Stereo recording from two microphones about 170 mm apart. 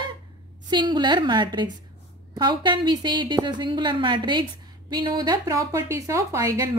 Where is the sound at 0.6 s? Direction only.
25° right (ahead or behind).